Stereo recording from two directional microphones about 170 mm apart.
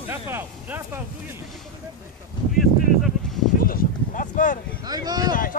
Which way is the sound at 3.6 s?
55° left (ahead or behind).